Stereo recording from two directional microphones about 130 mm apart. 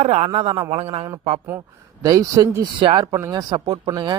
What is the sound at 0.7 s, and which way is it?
Speech, 50° right (ahead or behind).